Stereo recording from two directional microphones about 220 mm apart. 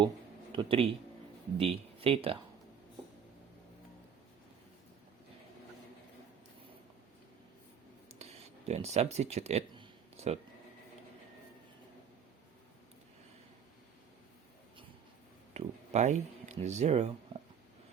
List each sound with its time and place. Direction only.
0.5 s speech: 25° right (ahead or behind)
8.2 s a sound: 30° right (ahead or behind)
15.5 s speech: 30° right (ahead or behind)